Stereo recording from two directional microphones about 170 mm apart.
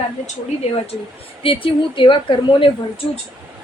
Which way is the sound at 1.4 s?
30° left (ahead or behind).